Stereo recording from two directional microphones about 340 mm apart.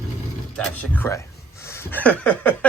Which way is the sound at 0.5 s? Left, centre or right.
Centre.